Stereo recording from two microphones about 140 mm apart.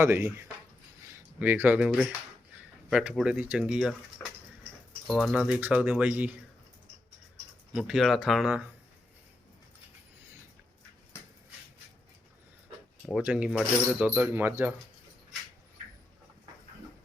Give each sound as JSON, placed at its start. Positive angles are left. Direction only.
{"t": 0.0, "sound": "speech", "side_deg": -15}
{"t": 2.9, "sound": "speech", "side_deg": -5}
{"t": 5.0, "sound": "speech", "side_deg": -5}
{"t": 7.7, "sound": "speech", "side_deg": -5}
{"t": 13.1, "sound": "speech", "side_deg": -5}